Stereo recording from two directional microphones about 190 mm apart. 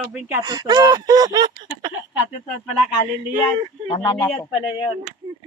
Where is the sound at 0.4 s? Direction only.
20° right (ahead or behind).